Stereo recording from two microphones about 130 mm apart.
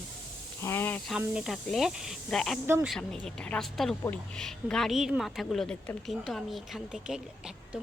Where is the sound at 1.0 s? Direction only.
5° right (ahead or behind).